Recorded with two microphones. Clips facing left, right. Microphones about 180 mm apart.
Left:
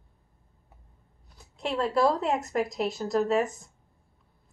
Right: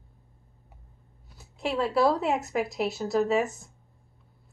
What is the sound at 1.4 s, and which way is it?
A woman's voice, 5° right (ahead or behind).